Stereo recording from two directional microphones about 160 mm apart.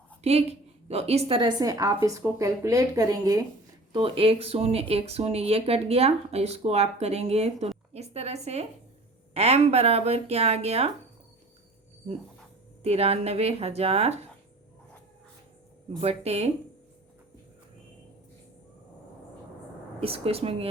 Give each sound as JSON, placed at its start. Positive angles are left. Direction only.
{"t": 0.2, "sound": "a woman's voice", "side_deg": -40}
{"t": 3.9, "sound": "speech", "side_deg": -35}
{"t": 12.8, "sound": "speech", "side_deg": -40}
{"t": 16.0, "sound": "speech", "side_deg": -40}
{"t": 20.0, "sound": "speech", "side_deg": -35}